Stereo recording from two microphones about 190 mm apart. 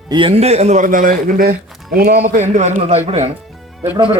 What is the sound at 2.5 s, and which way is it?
Speech, 40° right (ahead or behind).